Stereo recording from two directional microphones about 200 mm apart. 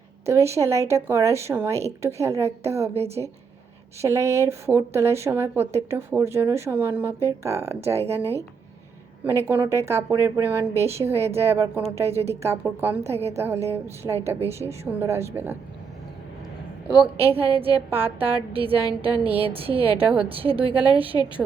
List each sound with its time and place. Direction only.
0.3 s speech: 15° right (ahead or behind)
4.0 s speech: 15° right (ahead or behind)
17.2 s a woman's voice: 30° right (ahead or behind)
19.0 s speech: 10° right (ahead or behind)
19.4 s a woman's voice: 30° right (ahead or behind)
20.1 s speech: 10° right (ahead or behind)
20.3 s a woman's voice: 30° right (ahead or behind)